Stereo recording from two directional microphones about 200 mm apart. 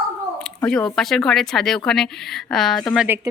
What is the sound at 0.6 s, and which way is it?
Speech, 5° left (ahead or behind).